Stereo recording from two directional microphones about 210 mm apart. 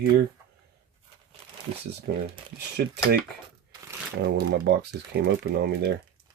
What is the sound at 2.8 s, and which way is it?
Speech, 50° right (ahead or behind).